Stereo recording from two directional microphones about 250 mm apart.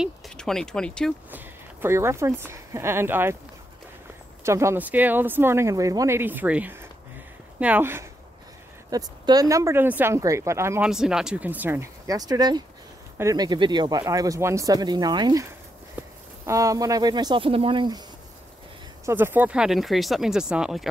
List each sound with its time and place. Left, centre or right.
0.0 s speech: centre
1.3 s speech: centre
4.5 s speech: centre
19.0 s speech: centre